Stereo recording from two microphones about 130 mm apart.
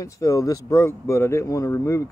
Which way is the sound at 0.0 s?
25° left (ahead or behind).